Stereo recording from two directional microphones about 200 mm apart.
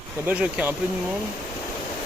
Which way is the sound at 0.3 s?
5° right (ahead or behind).